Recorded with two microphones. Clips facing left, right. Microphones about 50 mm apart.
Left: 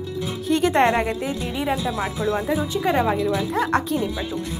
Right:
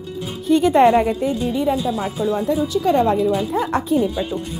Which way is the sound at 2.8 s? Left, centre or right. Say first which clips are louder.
Right 4 dB; centre.